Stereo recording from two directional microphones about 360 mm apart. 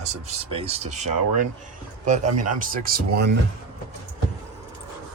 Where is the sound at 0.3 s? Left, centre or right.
Centre.